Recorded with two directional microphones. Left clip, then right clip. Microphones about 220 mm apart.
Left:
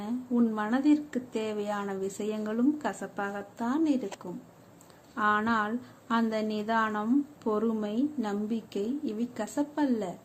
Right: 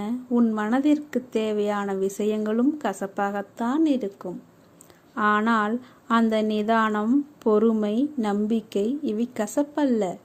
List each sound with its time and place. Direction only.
0.0 s a woman's voice: 25° right (ahead or behind)